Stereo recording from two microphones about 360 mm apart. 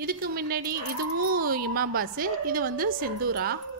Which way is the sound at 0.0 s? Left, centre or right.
Right.